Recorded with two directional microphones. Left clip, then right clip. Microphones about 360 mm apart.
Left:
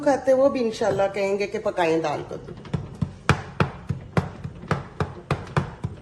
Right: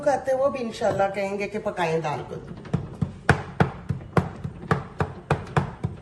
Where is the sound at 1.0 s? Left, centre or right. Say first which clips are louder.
Left 2 dB; left.